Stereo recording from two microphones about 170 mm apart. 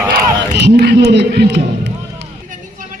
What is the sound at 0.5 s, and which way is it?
A man's voice, 75° right (ahead or behind).